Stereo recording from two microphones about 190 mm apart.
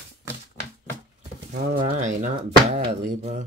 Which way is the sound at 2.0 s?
40° right (ahead or behind).